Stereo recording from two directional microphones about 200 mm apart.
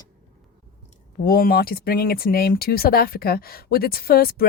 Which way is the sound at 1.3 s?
50° left (ahead or behind).